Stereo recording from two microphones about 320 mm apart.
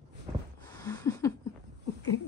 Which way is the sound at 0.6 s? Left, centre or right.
Centre.